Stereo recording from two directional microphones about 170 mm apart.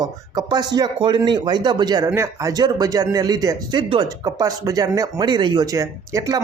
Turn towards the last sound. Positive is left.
turn(degrees=-20)  # may be behind; listen again after turning